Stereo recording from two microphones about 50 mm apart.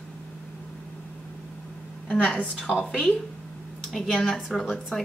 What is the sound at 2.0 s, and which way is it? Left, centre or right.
A woman's voice, centre.